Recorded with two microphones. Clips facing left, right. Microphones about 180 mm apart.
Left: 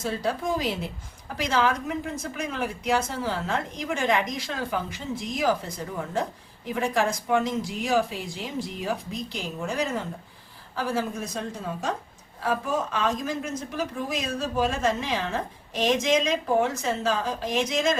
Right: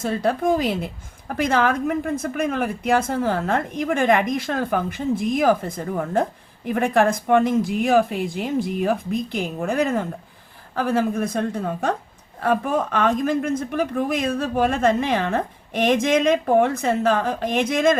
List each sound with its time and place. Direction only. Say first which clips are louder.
0.0 s a woman's voice: right 6 dB; 55° right (ahead or behind)